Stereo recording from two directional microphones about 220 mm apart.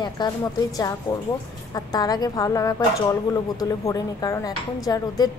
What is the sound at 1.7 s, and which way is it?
Speech, 15° left (ahead or behind).